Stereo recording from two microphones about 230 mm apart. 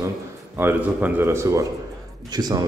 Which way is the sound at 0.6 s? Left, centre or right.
Centre.